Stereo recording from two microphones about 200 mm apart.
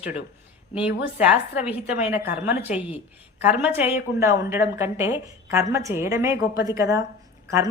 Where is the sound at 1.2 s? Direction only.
5° right (ahead or behind).